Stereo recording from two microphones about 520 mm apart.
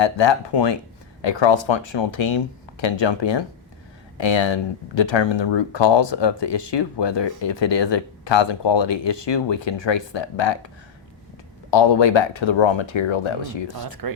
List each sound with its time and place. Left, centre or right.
0.0 s speech: left
11.7 s speech: left
14.0 s speech: right